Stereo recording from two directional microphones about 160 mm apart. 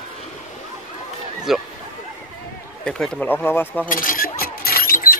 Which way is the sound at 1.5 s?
Centre (ahead or behind).